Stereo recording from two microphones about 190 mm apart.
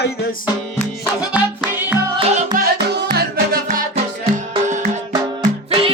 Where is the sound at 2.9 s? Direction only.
55° right (ahead or behind).